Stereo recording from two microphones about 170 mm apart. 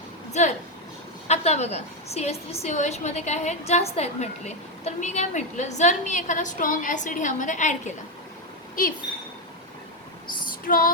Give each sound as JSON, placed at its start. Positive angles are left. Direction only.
{"t": 0.4, "sound": "a woman's voice", "side_deg": 45}
{"t": 8.8, "sound": "female singing", "side_deg": 55}
{"t": 10.7, "sound": "female singing", "side_deg": 55}